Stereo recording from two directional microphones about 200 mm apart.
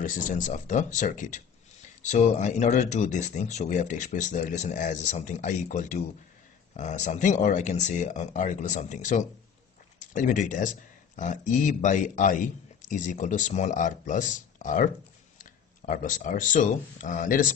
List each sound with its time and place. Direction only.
0.0 s speech: 40° left (ahead or behind)